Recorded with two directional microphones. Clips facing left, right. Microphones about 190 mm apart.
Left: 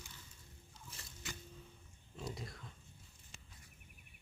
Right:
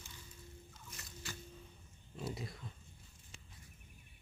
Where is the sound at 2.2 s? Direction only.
5° right (ahead or behind).